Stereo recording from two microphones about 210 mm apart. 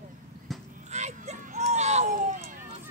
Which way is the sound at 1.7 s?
30° right (ahead or behind).